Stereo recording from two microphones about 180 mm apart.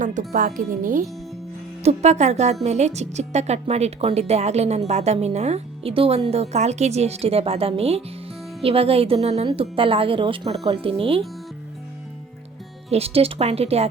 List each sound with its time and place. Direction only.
0.0 s speech: 45° right (ahead or behind)
1.8 s speech: 35° right (ahead or behind)
12.9 s speech: 35° right (ahead or behind)